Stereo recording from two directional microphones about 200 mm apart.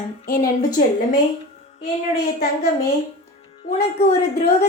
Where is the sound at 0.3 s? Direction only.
45° left (ahead or behind).